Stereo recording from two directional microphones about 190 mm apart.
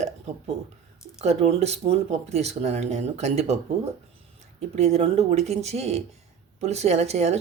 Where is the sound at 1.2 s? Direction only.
35° right (ahead or behind).